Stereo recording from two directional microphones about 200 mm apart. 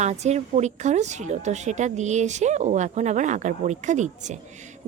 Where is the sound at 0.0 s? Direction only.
35° right (ahead or behind).